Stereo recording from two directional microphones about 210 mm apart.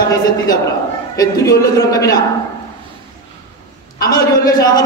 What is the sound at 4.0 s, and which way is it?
Speech, 15° left (ahead or behind).